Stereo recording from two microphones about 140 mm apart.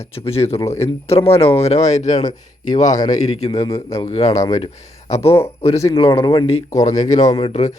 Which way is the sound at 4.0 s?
50° left (ahead or behind).